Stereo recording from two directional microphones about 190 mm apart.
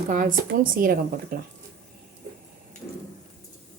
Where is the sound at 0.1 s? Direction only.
45° right (ahead or behind).